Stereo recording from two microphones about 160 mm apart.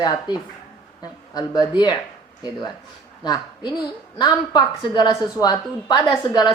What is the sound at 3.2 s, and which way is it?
A woman's voice, 25° left (ahead or behind).